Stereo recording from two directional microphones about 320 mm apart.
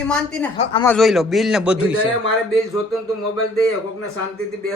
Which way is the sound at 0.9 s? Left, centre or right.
Centre.